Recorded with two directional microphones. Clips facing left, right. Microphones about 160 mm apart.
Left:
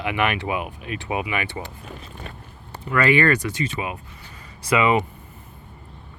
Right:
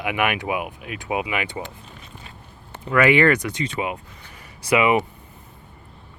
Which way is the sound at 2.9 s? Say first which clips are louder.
Right 2 dB; 15° right (ahead or behind).